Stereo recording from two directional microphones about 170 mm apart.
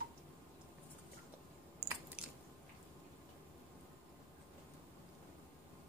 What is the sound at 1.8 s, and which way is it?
Biting, 15° right (ahead or behind).